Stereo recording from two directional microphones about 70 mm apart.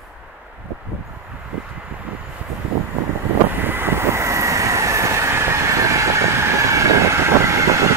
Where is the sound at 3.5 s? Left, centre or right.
Right.